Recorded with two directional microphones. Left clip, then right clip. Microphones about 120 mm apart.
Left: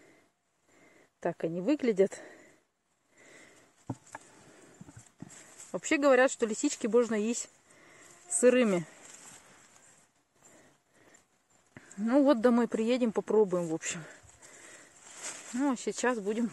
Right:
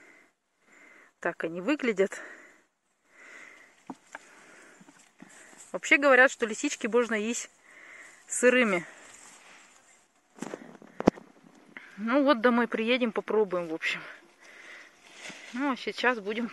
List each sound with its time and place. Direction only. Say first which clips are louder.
1.2 s speech: right 1 dB; 25° left (ahead or behind)
3.3 s sniff: right 7 dB; 30° left (ahead or behind)
5.8 s speech: right 4 dB; 45° left (ahead or behind)
11.7 s speech: right 1 dB; 45° left (ahead or behind)
13.7 s speech: right 7 dB; 55° left (ahead or behind)
15.5 s speech: right 1 dB; 50° left (ahead or behind)
15.8 s speech: right 3 dB; 65° left (ahead or behind)